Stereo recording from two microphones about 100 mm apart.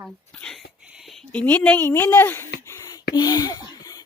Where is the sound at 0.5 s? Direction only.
Centre (ahead or behind).